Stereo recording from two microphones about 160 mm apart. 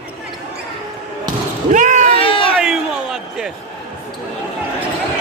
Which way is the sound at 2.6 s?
5° right (ahead or behind).